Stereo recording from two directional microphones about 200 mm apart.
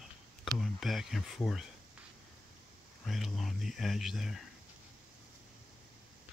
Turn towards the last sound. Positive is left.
turn(degrees=0)  # may be behind; listen again after turning